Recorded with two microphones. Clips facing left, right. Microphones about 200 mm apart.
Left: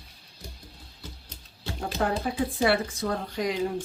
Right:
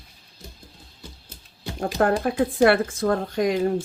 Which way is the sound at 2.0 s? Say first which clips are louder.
Right 6 dB; 55° right (ahead or behind).